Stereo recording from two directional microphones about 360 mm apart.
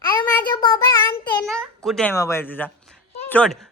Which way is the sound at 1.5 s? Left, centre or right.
Centre.